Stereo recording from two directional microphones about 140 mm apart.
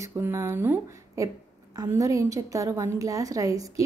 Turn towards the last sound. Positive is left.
turn(degrees=-25)  # may be behind; listen again after turning